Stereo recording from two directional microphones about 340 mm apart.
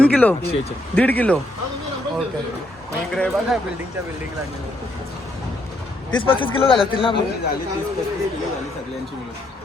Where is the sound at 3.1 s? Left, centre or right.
Centre.